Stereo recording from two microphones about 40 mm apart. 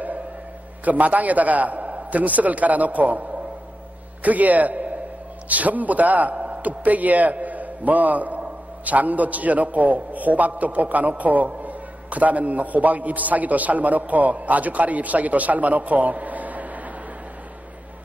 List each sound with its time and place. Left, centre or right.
0.8 s a man's voice: right